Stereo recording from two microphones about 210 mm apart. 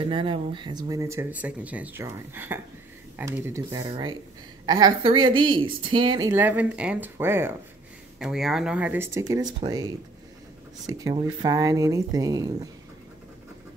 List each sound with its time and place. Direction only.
0.0 s a woman's voice: 25° right (ahead or behind)